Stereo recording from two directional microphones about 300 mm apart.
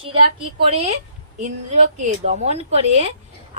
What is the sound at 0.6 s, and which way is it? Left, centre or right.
A woman's voice, centre.